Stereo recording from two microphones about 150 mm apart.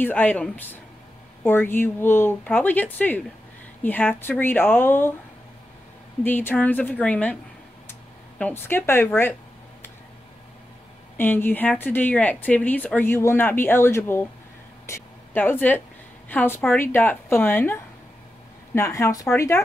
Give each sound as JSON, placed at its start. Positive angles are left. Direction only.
{"t": 0.0, "sound": "speech", "side_deg": 10}
{"t": 6.2, "sound": "speech", "side_deg": 10}
{"t": 8.4, "sound": "speech", "side_deg": 10}
{"t": 11.1, "sound": "speech", "side_deg": 15}
{"t": 14.9, "sound": "a sound", "side_deg": 15}
{"t": 16.3, "sound": "speech", "side_deg": 15}
{"t": 18.8, "sound": "speech", "side_deg": 20}